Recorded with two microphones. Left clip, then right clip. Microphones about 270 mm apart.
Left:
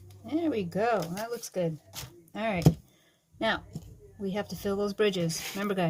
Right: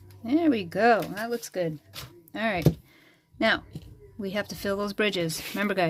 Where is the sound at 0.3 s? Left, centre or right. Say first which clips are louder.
Right 6 dB; right.